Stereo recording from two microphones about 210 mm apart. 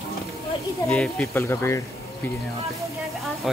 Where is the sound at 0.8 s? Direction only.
5° left (ahead or behind).